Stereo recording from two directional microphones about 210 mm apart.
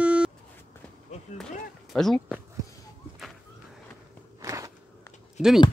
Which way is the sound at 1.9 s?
Centre (ahead or behind).